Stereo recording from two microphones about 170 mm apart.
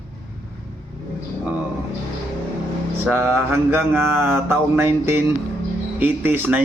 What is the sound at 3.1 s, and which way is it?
Mantra, 15° right (ahead or behind).